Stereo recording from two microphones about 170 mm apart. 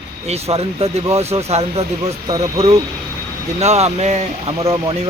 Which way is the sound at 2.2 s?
25° right (ahead or behind).